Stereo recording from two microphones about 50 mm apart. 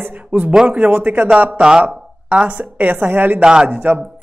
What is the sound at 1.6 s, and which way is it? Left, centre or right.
Speech, centre.